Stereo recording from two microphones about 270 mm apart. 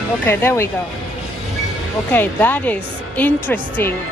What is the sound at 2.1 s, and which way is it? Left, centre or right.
Speech, centre.